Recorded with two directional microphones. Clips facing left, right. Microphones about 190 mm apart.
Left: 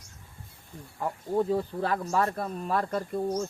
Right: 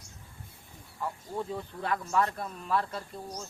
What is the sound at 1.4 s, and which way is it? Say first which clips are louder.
Speech: left 9 dB; 40° left (ahead or behind).